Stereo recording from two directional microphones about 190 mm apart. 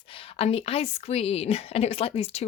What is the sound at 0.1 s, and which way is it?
A woman's voice, 30° left (ahead or behind).